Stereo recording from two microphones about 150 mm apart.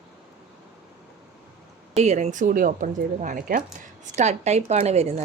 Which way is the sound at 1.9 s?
50° right (ahead or behind).